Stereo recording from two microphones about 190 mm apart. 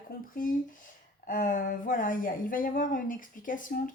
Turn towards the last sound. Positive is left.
turn(degrees=45)  # may be behind; listen again after turning